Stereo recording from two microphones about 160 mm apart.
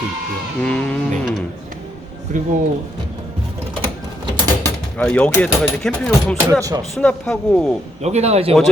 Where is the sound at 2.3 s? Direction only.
55° right (ahead or behind).